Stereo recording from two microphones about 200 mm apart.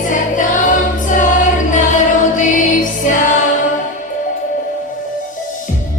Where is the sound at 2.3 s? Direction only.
40° left (ahead or behind).